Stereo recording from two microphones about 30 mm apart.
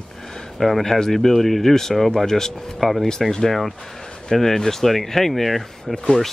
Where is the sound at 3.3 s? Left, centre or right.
Centre.